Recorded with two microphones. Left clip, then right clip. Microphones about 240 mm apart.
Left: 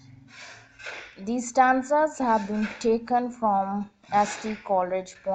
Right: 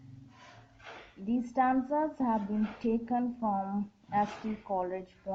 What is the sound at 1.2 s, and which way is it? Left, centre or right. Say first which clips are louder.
A woman's voice: left 8 dB; left.